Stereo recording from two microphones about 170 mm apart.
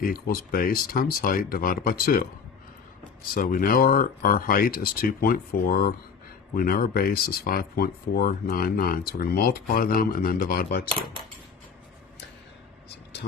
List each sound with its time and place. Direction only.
0.0 s speech: 60° left (ahead or behind)
3.3 s speech: 60° left (ahead or behind)